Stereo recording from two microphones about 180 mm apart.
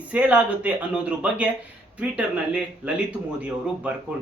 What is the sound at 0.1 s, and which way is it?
Speech, 5° right (ahead or behind).